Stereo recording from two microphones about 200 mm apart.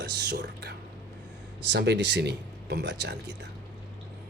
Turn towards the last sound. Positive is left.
turn(degrees=-60)  # may be behind; listen again after turning